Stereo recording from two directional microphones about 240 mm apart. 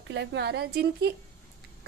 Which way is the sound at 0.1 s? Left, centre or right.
Right.